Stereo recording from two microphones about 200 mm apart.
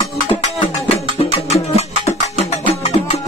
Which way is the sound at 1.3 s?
30° left (ahead or behind).